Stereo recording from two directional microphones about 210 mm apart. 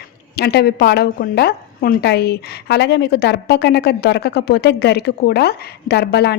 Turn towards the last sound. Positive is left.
turn(degrees=50)  # may be behind; listen again after turning